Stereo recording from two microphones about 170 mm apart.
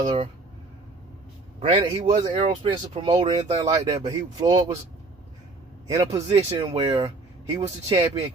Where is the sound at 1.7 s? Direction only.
30° right (ahead or behind).